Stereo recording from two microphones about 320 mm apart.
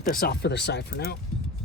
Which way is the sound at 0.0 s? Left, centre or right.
Left.